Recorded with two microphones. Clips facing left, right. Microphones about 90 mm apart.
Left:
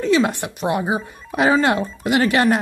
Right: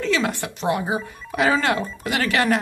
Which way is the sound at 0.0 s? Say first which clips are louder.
Left 5 dB; 20° left (ahead or behind).